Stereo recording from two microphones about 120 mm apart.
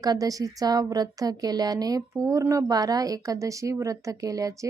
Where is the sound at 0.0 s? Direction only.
30° right (ahead or behind).